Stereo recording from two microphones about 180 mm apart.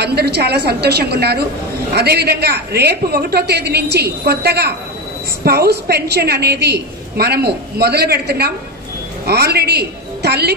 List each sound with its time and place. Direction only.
0.0 s a woman's voice: 65° right (ahead or behind)